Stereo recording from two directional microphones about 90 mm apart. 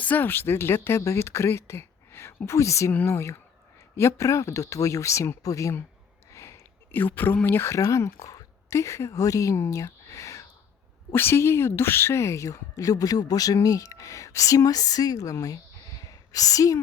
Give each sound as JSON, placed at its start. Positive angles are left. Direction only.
{"t": 0.0, "sound": "speech", "side_deg": 20}
{"t": 6.9, "sound": "speech", "side_deg": 20}